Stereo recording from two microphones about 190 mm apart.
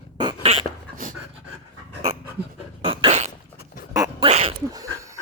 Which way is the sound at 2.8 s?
30° right (ahead or behind).